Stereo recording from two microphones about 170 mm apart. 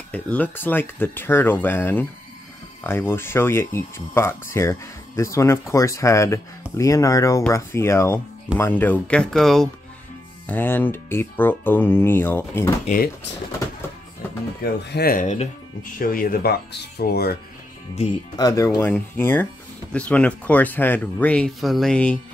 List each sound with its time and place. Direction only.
0.1 s speech: 10° left (ahead or behind)
12.8 s speech: 55° left (ahead or behind)
14.6 s speech: 65° left (ahead or behind)
15.1 s speech: 45° left (ahead or behind)
16.0 s speech: 55° left (ahead or behind)
18.3 s speech: 20° left (ahead or behind)